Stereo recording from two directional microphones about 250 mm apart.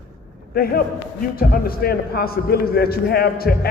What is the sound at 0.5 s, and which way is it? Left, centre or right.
A man's voice, left.